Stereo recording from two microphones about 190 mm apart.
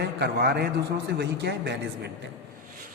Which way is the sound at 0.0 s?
60° right (ahead or behind).